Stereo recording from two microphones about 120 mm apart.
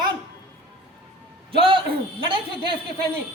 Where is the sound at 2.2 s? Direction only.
45° right (ahead or behind).